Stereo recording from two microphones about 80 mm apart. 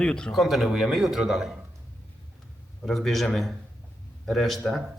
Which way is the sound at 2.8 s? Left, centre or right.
Centre.